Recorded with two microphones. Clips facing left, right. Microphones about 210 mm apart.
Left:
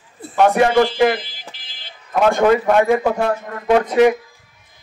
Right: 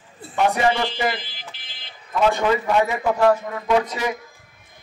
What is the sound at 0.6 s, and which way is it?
A man's voice, 55° left (ahead or behind).